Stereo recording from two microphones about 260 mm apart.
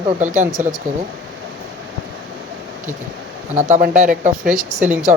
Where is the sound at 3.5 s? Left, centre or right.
Right.